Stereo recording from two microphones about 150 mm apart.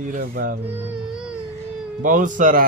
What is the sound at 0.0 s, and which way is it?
Speech, 70° right (ahead or behind).